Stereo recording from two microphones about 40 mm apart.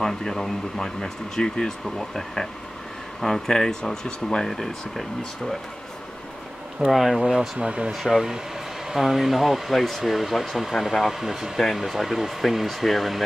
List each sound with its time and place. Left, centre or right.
0.0 s speech: centre
4.5 s speech: centre
6.9 s speech: centre
7.2 s speech: centre
7.9 s speech: centre